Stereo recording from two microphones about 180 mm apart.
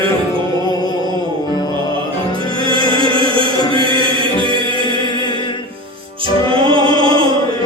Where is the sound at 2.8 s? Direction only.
20° left (ahead or behind).